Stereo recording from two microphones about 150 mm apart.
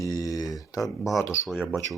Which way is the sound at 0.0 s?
25° left (ahead or behind).